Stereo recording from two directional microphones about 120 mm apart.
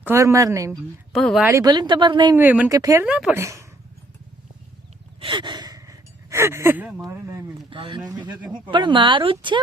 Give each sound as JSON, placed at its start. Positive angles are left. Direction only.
{"t": 0.0, "sound": "speech", "side_deg": -25}
{"t": 0.7, "sound": "a woman's voice", "side_deg": 5}
{"t": 1.6, "sound": "speech", "side_deg": -35}
{"t": 2.3, "sound": "speech", "side_deg": -15}
{"t": 2.6, "sound": "speech", "side_deg": -30}
{"t": 3.0, "sound": "speech", "side_deg": -10}
{"t": 3.3, "sound": "speech", "side_deg": -25}
{"t": 5.2, "sound": "gasp", "side_deg": -40}
{"t": 7.0, "sound": "speech", "side_deg": -25}
{"t": 7.7, "sound": "speech", "side_deg": -45}
{"t": 8.0, "sound": "speech", "side_deg": -35}